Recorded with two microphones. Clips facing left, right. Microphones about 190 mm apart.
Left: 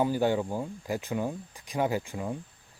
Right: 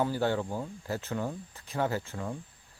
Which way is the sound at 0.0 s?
15° left (ahead or behind).